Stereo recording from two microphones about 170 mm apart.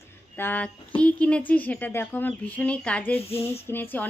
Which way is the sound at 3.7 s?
10° left (ahead or behind).